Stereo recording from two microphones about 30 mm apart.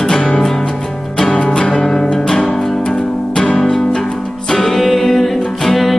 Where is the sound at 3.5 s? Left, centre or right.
Centre.